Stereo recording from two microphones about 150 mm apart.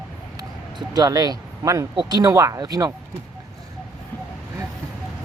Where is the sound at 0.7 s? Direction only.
25° right (ahead or behind).